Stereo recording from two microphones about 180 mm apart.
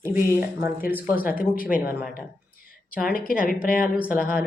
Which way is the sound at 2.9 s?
50° left (ahead or behind).